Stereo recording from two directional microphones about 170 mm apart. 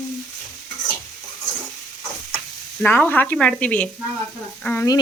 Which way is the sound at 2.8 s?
10° left (ahead or behind).